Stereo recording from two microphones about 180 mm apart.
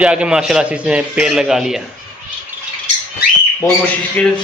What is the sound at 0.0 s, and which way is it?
A man's voice, 5° right (ahead or behind).